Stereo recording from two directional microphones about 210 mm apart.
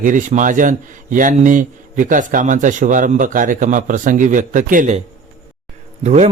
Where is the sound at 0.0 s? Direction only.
40° right (ahead or behind).